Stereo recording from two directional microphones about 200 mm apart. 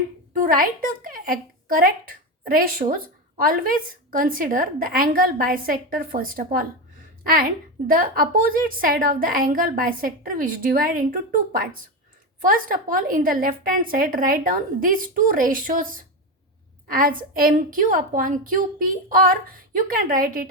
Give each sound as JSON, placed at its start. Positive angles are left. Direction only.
{"t": 0.3, "sound": "a woman's voice", "side_deg": -45}